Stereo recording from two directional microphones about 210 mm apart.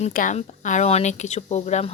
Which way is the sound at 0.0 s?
40° left (ahead or behind).